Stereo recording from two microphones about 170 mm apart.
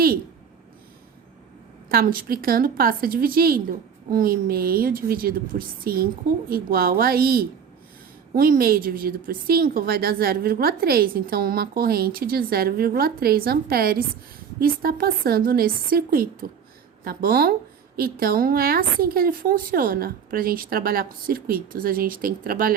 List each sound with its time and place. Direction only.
1.9 s a woman's voice: 60° right (ahead or behind)